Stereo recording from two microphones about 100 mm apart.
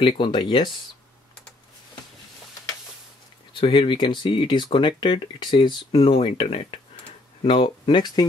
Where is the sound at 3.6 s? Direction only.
60° left (ahead or behind).